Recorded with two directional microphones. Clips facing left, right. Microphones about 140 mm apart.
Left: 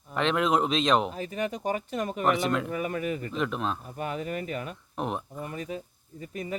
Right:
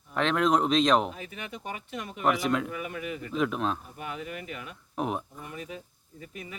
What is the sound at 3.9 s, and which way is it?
Speech, 40° left (ahead or behind).